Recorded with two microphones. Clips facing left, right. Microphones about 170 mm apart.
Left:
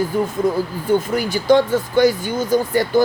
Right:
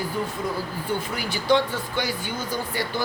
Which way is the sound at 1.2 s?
45° left (ahead or behind).